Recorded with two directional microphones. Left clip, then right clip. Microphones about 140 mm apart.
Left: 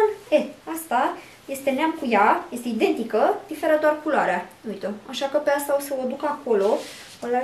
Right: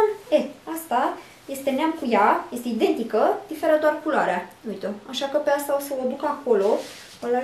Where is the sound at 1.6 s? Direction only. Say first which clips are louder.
Left 1 dB; 5° right (ahead or behind).